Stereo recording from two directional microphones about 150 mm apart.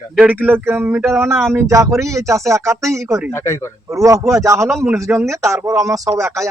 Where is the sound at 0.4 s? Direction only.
15° right (ahead or behind).